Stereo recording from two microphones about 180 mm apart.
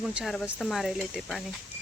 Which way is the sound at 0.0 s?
5° right (ahead or behind).